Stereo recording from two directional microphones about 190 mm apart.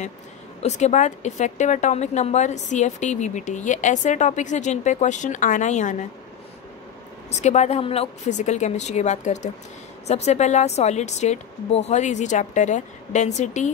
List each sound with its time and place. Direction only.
0.6 s a woman's voice: 35° left (ahead or behind)
7.2 s a woman's voice: 35° left (ahead or behind)